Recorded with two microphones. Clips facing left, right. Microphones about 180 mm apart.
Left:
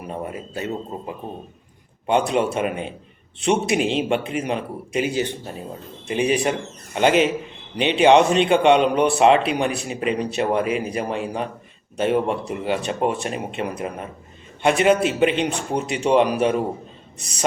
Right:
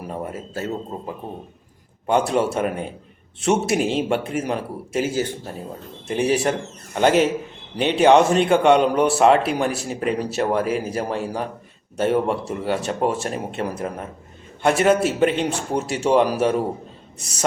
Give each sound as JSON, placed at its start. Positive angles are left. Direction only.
{"t": 0.0, "sound": "a man's voice", "side_deg": 15}
{"t": 2.0, "sound": "a man's voice", "side_deg": 15}